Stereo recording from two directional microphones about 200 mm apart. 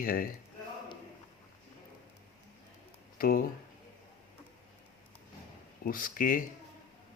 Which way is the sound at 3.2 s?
45° left (ahead or behind).